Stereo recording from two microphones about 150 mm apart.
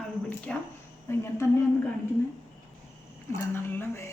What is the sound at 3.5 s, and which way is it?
Speech, 15° left (ahead or behind).